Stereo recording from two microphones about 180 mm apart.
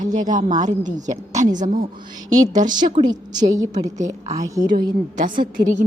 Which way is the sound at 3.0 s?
20° right (ahead or behind).